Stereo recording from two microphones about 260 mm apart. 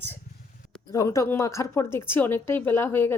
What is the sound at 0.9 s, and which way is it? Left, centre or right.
Speech, centre.